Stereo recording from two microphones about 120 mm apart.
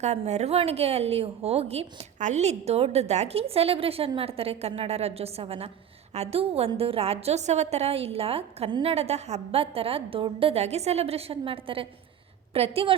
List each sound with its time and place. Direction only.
0.0 s a woman's voice: 70° right (ahead or behind)